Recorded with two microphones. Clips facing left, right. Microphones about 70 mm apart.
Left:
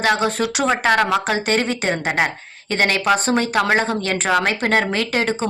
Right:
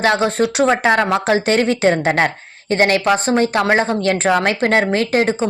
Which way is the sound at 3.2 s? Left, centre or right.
Right.